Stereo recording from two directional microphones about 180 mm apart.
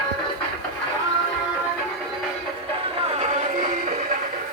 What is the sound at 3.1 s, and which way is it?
Music, 35° right (ahead or behind).